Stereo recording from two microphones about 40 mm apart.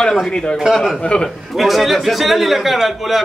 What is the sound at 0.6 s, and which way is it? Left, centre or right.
A man's voice, centre.